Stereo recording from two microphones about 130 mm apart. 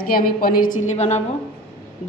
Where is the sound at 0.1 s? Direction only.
80° left.